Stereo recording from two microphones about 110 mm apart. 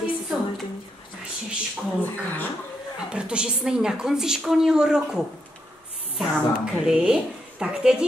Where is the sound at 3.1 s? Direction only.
10° right (ahead or behind).